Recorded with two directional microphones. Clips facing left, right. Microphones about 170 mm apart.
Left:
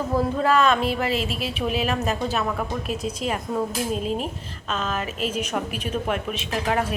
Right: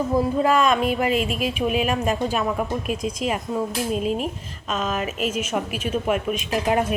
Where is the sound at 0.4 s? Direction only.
15° right (ahead or behind).